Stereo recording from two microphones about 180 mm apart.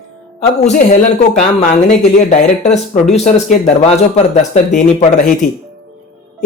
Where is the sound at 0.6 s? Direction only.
40° left (ahead or behind).